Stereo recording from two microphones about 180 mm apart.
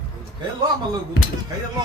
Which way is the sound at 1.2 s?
75° left (ahead or behind).